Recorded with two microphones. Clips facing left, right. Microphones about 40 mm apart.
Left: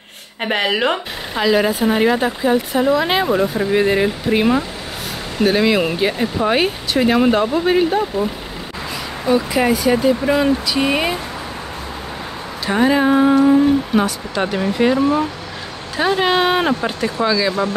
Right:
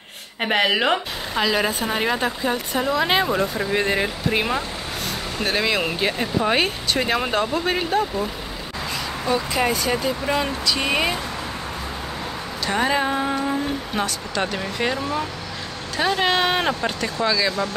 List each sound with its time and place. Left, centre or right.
0.4 s speech: centre
12.6 s speech: centre
15.0 s speech: centre